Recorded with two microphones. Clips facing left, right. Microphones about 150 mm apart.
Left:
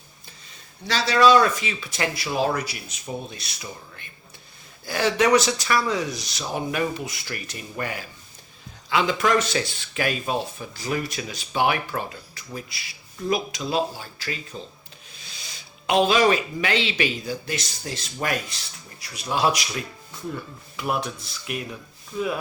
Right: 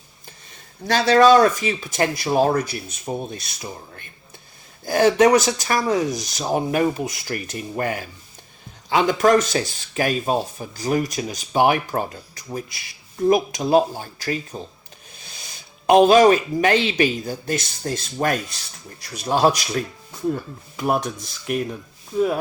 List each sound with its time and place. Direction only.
0.9 s speech: 50° right (ahead or behind)